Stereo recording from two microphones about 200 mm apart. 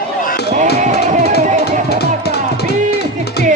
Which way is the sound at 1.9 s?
55° left (ahead or behind).